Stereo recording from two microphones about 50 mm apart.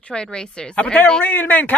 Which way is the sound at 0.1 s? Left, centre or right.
Centre.